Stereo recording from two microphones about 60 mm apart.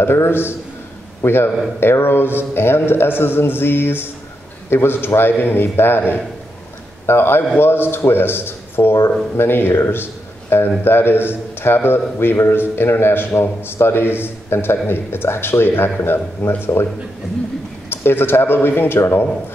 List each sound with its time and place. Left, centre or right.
0.0 s a man's voice: left
17.8 s a man's voice: left